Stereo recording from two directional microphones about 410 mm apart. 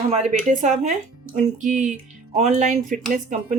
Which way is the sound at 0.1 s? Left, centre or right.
Centre.